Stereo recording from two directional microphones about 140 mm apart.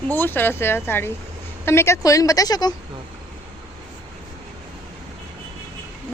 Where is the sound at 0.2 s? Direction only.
15° left (ahead or behind).